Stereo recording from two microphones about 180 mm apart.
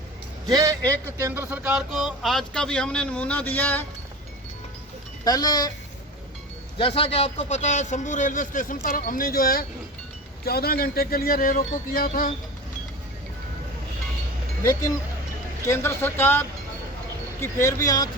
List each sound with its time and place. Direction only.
0.4 s speech: 20° right (ahead or behind); by 3.8 s 10° left (ahead or behind)
5.2 s speech: 20° left (ahead or behind)
6.7 s a man's voice: 30° left (ahead or behind); by 12.3 s 50° left (ahead or behind)
14.6 s speech: 20° left (ahead or behind)